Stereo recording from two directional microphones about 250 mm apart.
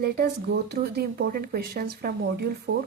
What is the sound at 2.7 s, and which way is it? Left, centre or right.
Speech, right.